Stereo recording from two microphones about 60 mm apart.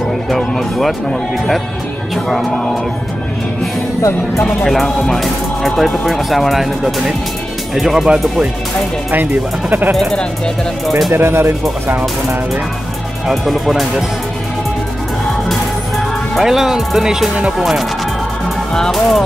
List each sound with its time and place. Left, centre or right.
0.3 s speech: centre
2.2 s speech: centre
4.5 s speech: centre
9.1 s speech: right
9.9 s speech: centre
10.9 s speech: centre
11.1 s speech: right
13.3 s speech: centre
16.3 s speech: centre
18.7 s speech: centre